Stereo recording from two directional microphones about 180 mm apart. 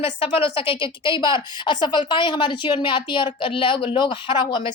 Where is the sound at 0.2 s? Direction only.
30° left (ahead or behind).